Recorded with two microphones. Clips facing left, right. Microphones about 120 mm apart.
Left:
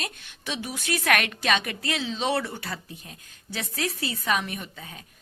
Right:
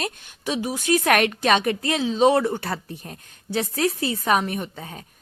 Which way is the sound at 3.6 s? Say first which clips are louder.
Right 8 dB; 35° right (ahead or behind).